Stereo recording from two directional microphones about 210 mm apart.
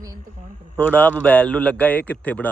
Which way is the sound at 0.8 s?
10° left (ahead or behind).